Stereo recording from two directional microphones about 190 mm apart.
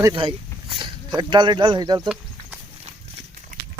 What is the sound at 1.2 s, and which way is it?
Speech, 25° right (ahead or behind).